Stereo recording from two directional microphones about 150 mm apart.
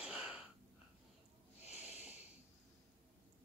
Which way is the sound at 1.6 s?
45° left (ahead or behind).